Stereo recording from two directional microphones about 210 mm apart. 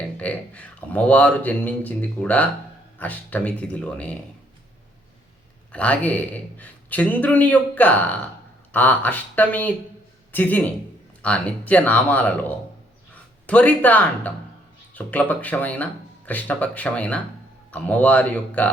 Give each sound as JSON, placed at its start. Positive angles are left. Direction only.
{"t": 0.2, "sound": "speech", "side_deg": 5}
{"t": 5.7, "sound": "speech", "side_deg": 5}